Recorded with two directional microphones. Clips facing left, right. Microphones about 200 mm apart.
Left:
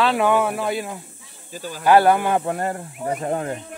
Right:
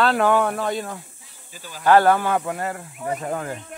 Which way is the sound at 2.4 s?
35° left (ahead or behind).